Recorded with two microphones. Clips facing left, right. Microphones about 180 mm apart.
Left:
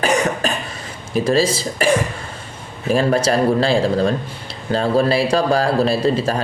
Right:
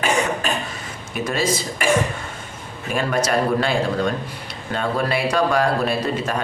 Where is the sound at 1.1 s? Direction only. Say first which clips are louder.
Left 6 dB; 30° left (ahead or behind).